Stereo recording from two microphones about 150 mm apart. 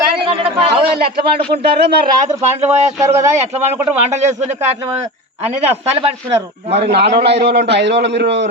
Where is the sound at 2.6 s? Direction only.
20° right (ahead or behind).